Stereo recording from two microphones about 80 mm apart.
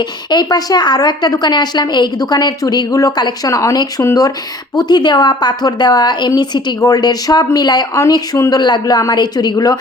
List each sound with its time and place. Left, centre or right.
0.3 s a woman's voice: left
4.8 s a woman's voice: left